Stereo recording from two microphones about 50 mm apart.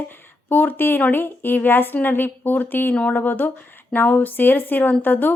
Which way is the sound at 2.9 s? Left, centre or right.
Left.